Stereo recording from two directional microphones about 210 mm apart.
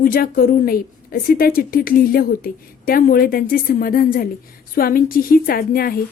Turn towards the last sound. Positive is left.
turn(degrees=45)  # may be behind; listen again after turning